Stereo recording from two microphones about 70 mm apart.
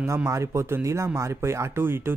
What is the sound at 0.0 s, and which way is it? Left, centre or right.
Speech, right.